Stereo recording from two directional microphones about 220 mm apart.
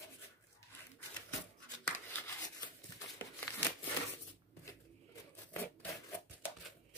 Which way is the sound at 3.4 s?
10° left (ahead or behind).